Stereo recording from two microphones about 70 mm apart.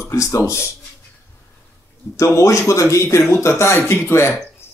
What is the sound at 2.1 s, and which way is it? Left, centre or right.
Speech, left.